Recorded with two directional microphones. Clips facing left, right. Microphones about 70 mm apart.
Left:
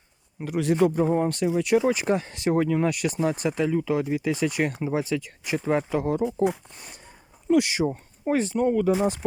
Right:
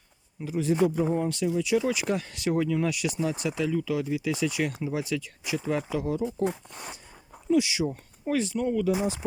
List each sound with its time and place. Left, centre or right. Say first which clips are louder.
0.3 s speech: left 3 dB; left
1.8 s speech: left 4 dB; left
6.2 s speech: left 4 dB; centre
7.5 s speech: left 3 dB; left